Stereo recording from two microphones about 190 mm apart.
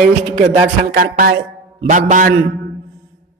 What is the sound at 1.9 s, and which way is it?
Music, 40° right (ahead or behind).